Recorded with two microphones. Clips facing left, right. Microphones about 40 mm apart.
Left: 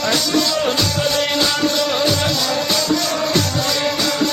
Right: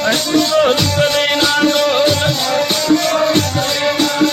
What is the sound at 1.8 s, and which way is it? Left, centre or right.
Music, right.